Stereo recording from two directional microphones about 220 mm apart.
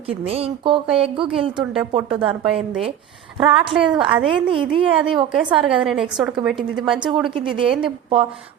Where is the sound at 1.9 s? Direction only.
25° right (ahead or behind).